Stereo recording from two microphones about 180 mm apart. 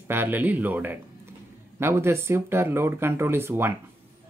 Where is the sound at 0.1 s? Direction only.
10° right (ahead or behind).